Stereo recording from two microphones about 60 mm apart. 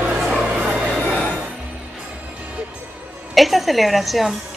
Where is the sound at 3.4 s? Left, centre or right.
Centre.